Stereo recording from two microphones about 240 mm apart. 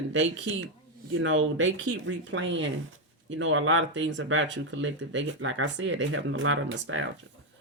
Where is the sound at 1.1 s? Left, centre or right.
Right.